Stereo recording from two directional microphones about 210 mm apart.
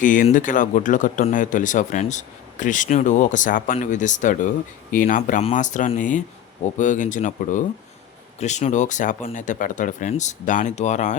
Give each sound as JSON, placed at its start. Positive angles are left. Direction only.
{"t": 0.0, "sound": "speech", "side_deg": 40}